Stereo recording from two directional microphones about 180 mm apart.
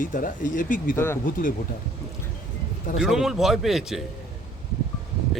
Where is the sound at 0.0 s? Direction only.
45° left (ahead or behind).